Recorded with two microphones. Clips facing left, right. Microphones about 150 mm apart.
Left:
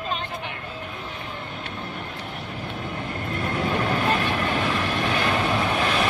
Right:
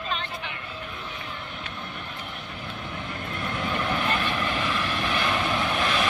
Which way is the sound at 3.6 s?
40° left (ahead or behind).